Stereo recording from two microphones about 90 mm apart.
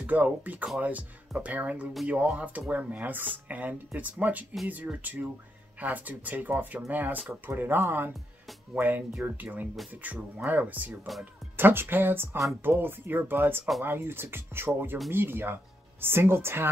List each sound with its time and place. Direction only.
0.0 s speech: 15° right (ahead or behind)